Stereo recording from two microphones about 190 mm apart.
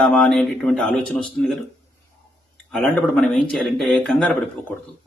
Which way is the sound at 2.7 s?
5° left (ahead or behind).